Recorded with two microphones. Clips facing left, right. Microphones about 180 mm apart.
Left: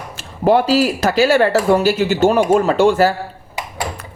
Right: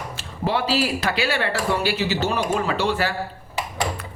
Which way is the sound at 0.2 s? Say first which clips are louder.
Left 10 dB; 50° left (ahead or behind).